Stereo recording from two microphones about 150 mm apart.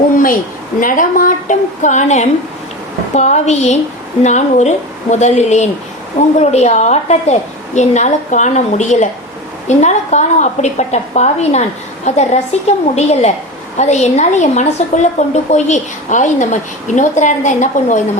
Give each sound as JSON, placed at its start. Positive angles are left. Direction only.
{"t": 0.8, "sound": "a woman's voice", "side_deg": 65}